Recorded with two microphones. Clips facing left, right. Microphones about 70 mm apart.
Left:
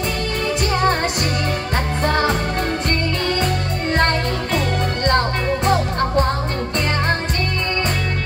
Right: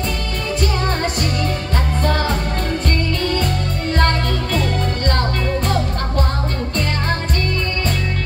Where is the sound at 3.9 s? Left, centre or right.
Left.